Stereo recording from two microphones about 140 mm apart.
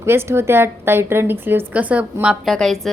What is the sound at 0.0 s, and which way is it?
A woman's voice, 20° right (ahead or behind).